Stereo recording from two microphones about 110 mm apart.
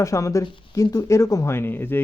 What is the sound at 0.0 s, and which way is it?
Speech, 30° left (ahead or behind).